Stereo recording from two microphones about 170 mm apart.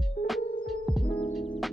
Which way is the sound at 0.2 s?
55° left (ahead or behind).